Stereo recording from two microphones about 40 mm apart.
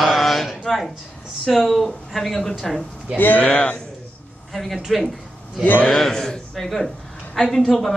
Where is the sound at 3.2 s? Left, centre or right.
Left.